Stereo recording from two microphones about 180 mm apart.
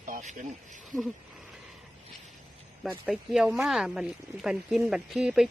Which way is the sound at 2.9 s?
5° right (ahead or behind).